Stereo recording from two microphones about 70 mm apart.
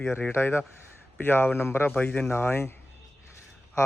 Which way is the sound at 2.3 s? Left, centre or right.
Left.